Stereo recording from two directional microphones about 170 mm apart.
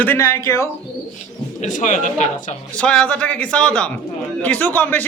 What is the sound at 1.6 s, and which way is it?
Speech, 45° left (ahead or behind).